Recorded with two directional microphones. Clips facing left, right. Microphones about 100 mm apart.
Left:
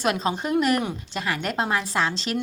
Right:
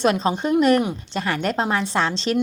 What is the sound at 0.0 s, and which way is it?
A woman's voice, 30° right (ahead or behind).